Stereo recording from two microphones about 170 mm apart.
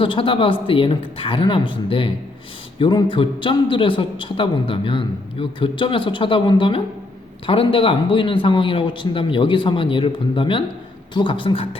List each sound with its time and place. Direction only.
0.0 s a man's voice: 30° left (ahead or behind)